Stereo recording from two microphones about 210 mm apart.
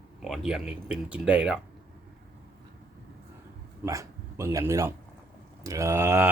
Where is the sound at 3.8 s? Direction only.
15° right (ahead or behind).